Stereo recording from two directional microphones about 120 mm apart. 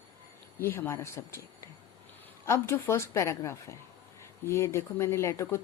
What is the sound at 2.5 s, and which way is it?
Speech, 20° left (ahead or behind).